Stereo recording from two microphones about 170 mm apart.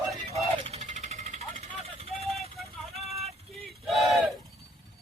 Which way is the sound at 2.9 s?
40° right (ahead or behind).